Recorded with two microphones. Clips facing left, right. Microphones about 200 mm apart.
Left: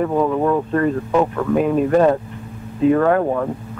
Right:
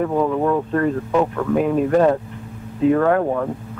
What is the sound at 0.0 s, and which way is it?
Speech, 25° left (ahead or behind).